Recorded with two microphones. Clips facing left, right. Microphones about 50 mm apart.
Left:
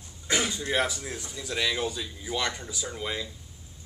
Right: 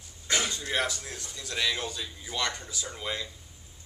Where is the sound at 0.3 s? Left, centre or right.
Centre.